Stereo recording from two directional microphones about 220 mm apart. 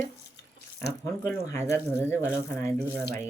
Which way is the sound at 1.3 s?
10° left (ahead or behind).